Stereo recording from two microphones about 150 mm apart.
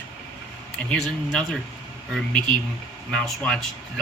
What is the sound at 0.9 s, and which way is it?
Speech, centre (ahead or behind).